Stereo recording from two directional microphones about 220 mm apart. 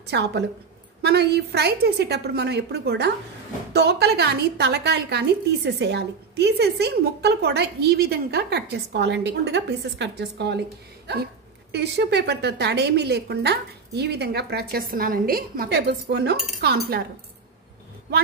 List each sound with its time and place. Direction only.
0.0 s a woman's voice: 50° right (ahead or behind)
11.7 s a woman's voice: 50° right (ahead or behind)